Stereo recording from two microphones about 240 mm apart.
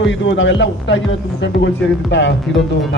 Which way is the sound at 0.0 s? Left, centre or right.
Left.